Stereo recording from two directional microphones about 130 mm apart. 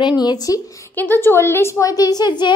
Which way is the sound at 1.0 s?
15° left (ahead or behind).